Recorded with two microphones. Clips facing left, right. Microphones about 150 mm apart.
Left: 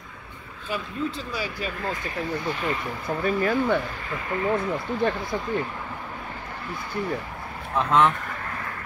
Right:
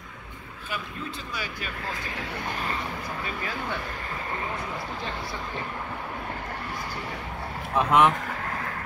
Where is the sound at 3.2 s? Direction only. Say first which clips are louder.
Left 14 dB; 50° left (ahead or behind).